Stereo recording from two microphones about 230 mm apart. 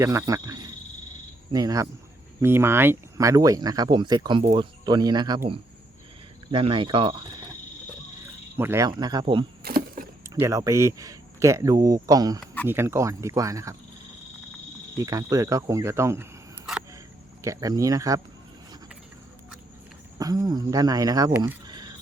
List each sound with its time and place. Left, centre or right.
0.0 s speech: centre
8.5 s speech: centre
9.6 s splinter: right
10.2 s speech: centre
14.9 s speech: centre
17.4 s speech: centre
20.1 s speech: centre